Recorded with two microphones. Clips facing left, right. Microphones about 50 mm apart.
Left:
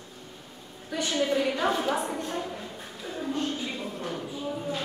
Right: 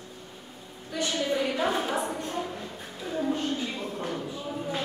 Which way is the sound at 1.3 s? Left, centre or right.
Centre.